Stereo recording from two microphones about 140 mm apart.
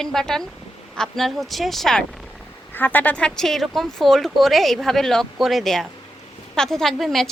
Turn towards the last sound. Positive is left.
turn(degrees=0)  # may be behind; listen again after turning